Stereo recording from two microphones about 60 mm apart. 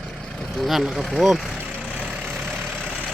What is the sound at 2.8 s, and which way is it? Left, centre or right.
Vehicle, right.